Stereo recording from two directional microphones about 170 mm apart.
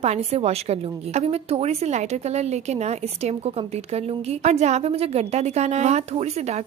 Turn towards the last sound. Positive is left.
turn(degrees=-40)  # may be behind; listen again after turning